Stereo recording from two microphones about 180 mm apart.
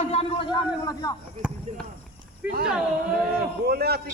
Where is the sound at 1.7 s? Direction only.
40° right (ahead or behind).